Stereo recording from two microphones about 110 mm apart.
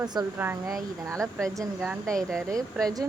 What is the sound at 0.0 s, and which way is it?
Speech, 40° right (ahead or behind).